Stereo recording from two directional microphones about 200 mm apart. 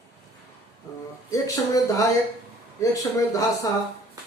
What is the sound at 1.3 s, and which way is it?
A man's voice, 15° left (ahead or behind).